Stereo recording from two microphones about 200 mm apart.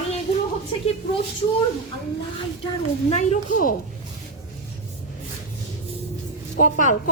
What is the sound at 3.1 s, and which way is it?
Speech, 35° left (ahead or behind).